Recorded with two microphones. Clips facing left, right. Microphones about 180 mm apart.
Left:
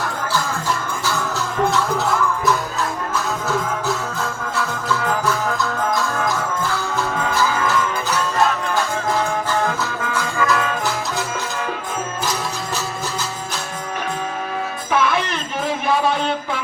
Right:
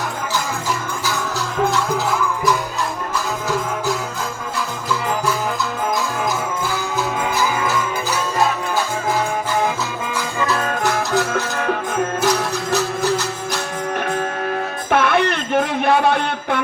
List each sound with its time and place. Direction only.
1.1 s music: centre (ahead or behind)
4.5 s music: centre (ahead or behind)
7.2 s music: 10° right (ahead or behind)
9.6 s music: 10° right (ahead or behind)
10.4 s music: 30° right (ahead or behind)
10.8 s music: 60° right (ahead or behind)
14.8 s a sound: 60° right (ahead or behind)